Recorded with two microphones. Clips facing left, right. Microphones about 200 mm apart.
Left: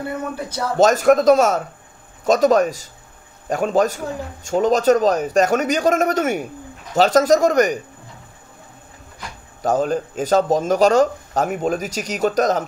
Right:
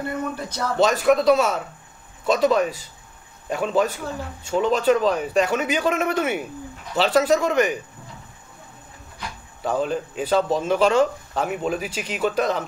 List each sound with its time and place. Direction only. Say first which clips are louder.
0.7 s speech: left 4 dB; 45° left (ahead or behind)
9.6 s speech: left 4 dB; 45° left (ahead or behind)